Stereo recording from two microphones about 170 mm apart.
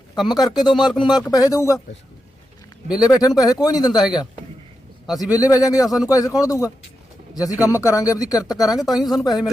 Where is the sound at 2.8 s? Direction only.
5° right (ahead or behind).